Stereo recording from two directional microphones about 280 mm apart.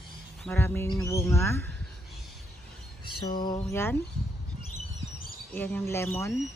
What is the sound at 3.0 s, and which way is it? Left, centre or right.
Speech, centre.